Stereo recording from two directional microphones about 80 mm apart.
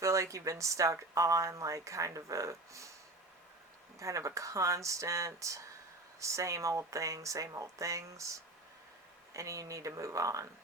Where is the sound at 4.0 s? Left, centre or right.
Right.